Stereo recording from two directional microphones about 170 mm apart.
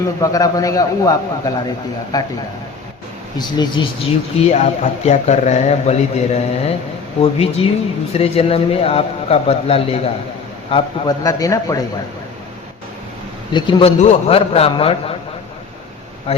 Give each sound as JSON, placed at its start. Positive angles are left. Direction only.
{"t": 0.2, "sound": "a man's voice", "side_deg": 20}
{"t": 3.3, "sound": "a man's voice", "side_deg": 25}
{"t": 4.4, "sound": "a man's voice", "side_deg": 40}
{"t": 13.5, "sound": "a man's voice", "side_deg": 30}